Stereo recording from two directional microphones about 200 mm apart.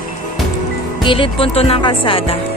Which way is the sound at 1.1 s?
25° left (ahead or behind).